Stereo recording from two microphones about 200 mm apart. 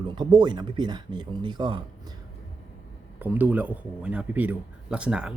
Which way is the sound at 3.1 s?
10° right (ahead or behind).